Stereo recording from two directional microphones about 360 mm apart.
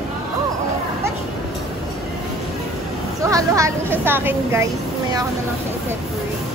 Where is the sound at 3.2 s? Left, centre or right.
Centre.